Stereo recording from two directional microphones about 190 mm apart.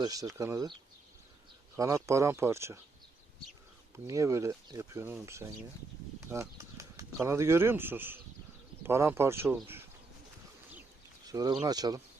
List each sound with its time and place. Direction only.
0.0 s speech: 20° right (ahead or behind)
4.0 s speech: 15° right (ahead or behind)
11.3 s speech: 20° right (ahead or behind)